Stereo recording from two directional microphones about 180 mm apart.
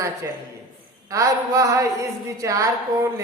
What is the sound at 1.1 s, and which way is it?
A woman's voice, 15° right (ahead or behind).